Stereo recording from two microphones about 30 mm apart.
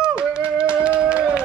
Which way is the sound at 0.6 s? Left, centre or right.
Right.